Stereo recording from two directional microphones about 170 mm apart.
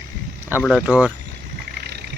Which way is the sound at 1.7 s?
70° right (ahead or behind).